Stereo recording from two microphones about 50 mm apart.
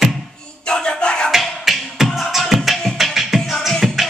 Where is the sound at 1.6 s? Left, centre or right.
Centre.